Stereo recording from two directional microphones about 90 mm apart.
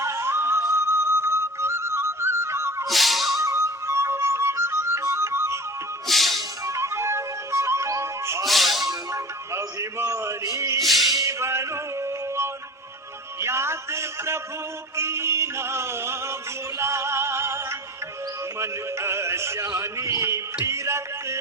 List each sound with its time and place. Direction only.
0.0 s music: 30° right (ahead or behind)
2.8 s music: centre (ahead or behind)
3.3 s music: 30° right (ahead or behind)
6.1 s music: centre (ahead or behind)
6.7 s music: 30° right (ahead or behind)
8.4 s music: centre (ahead or behind)
8.9 s music: 35° right (ahead or behind)
10.8 s music: centre (ahead or behind)
11.2 s male singing: 30° right (ahead or behind)
13.4 s a sound: 30° right (ahead or behind)
14.9 s music: 30° right (ahead or behind)